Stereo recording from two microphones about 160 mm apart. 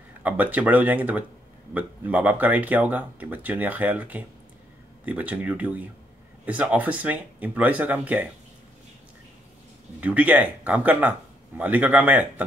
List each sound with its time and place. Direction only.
0.2 s speech: 10° right (ahead or behind)
9.9 s speech: 10° right (ahead or behind)